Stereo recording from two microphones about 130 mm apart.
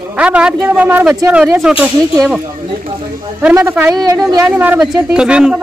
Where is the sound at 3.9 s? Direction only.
30° right (ahead or behind).